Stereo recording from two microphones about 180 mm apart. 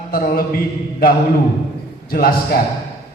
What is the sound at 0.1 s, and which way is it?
Speech, 55° left (ahead or behind).